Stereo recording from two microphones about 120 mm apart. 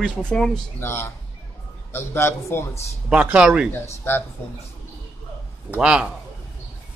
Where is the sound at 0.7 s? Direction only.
20° left (ahead or behind).